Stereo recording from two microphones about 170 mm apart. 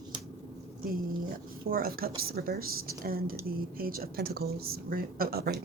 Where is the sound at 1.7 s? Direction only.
60° right (ahead or behind).